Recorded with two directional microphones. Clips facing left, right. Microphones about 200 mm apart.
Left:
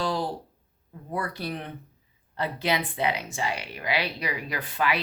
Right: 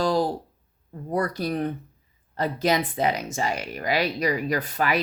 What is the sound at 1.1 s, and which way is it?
Speech, 40° right (ahead or behind).